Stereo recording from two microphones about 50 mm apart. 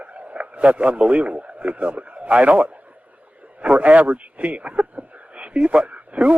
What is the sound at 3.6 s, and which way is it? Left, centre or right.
Speech, right.